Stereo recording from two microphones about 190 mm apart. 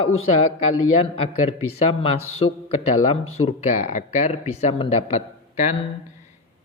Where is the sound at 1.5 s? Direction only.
30° left (ahead or behind).